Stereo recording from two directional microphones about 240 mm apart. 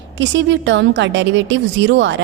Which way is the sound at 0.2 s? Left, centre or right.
Right.